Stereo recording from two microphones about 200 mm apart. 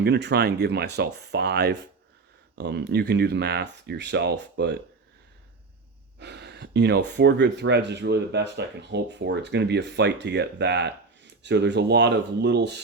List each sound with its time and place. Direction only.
0.0 s speech: 55° right (ahead or behind)
6.1 s speech: 55° right (ahead or behind)